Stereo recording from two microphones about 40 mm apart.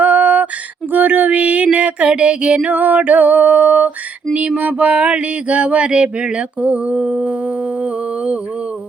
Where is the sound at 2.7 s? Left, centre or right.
Right.